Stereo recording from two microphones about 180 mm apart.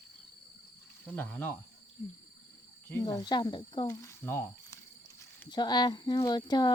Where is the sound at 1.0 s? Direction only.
10° left (ahead or behind).